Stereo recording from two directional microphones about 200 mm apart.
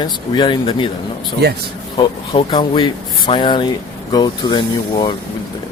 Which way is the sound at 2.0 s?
25° left (ahead or behind).